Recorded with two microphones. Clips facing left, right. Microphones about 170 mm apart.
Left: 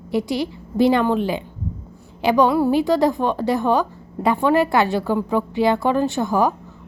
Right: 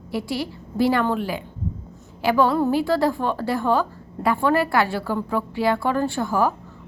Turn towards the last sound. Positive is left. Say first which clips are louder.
# left 3 dB
turn(degrees=20)  # may be behind; listen again after turning